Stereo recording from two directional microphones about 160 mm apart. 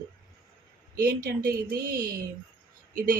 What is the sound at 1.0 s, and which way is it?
Speech, 65° right (ahead or behind).